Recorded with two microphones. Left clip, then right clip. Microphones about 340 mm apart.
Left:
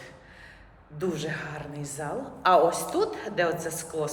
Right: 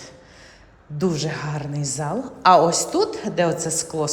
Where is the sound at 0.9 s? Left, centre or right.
Centre.